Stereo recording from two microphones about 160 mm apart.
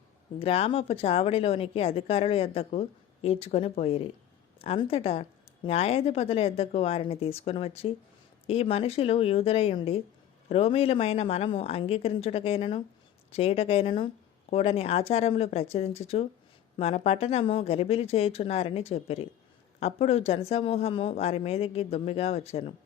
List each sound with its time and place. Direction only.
0.3 s a woman's voice: 40° left (ahead or behind)